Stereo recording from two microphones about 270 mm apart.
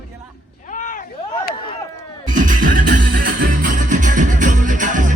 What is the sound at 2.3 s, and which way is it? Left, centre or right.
Music, right.